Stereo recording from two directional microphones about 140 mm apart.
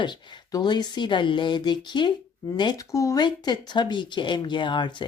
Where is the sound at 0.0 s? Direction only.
35° left (ahead or behind).